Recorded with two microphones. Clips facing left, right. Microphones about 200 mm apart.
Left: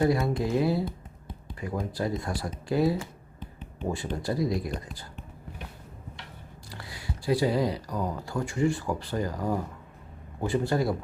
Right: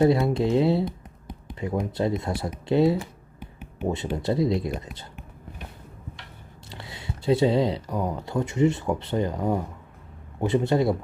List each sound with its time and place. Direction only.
0.0 s speech: 25° right (ahead or behind)
3.4 s finger snapping: 10° right (ahead or behind)
3.8 s speech: 20° right (ahead or behind)
6.7 s speech: 25° right (ahead or behind)